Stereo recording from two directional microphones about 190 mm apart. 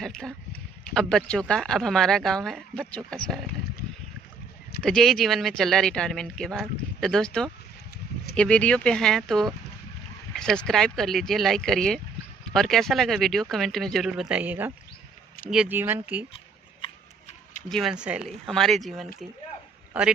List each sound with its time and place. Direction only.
0.0 s speech: 5° left (ahead or behind)
4.8 s speech: 5° left (ahead or behind)
16.8 s a sound: 35° left (ahead or behind)
17.7 s speech: centre (ahead or behind)